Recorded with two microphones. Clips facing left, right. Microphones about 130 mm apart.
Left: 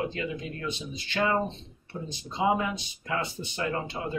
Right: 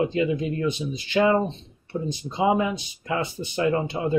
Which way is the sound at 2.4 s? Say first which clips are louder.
Right 4 dB; 15° right (ahead or behind).